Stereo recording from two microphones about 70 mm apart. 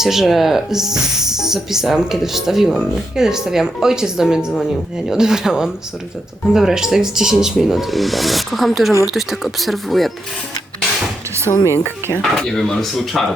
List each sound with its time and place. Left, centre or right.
0.0 s speech: centre
11.5 s speech: left
12.2 s speech: centre